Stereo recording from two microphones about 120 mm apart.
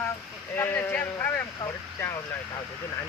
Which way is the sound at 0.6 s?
20° left (ahead or behind).